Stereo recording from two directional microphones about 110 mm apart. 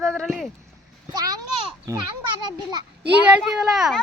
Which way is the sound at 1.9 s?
30° right (ahead or behind).